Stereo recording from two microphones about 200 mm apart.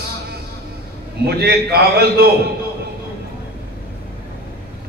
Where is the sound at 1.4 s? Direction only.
50° right (ahead or behind).